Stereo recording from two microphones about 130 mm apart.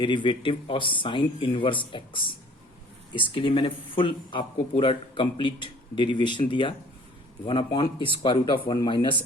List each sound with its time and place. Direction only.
0.0 s speech: 40° left (ahead or behind)